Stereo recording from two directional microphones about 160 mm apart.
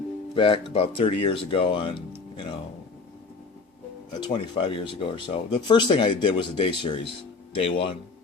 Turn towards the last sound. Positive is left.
turn(degrees=35)  # may be behind; listen again after turning